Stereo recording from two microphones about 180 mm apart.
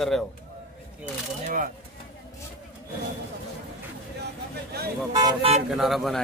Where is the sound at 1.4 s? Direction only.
50° right (ahead or behind).